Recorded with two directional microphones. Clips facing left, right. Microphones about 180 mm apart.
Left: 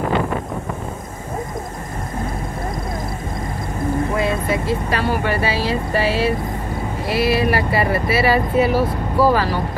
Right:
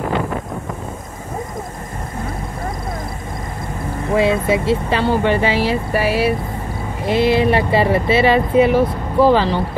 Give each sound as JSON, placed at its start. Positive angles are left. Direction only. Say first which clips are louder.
{"t": 4.2, "sound": "speech", "louder": "right 4 dB", "side_deg": -25}